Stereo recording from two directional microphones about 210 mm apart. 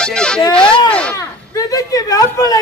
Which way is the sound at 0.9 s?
5° left (ahead or behind).